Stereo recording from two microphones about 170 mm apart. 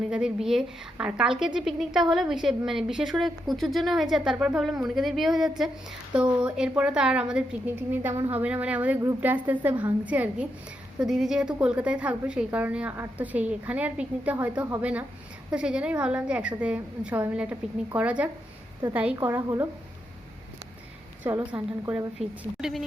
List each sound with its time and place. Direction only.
0.1 s a woman's voice: 5° right (ahead or behind)
21.2 s a woman's voice: 15° right (ahead or behind)